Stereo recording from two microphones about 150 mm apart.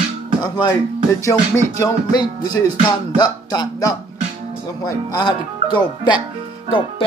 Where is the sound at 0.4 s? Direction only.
30° left (ahead or behind).